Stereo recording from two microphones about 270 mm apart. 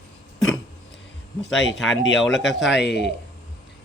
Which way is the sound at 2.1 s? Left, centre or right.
Centre.